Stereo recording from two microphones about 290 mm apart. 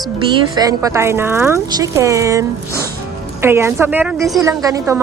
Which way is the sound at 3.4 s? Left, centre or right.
Centre.